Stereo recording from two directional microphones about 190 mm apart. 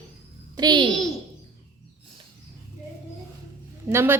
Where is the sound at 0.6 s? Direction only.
20° right (ahead or behind).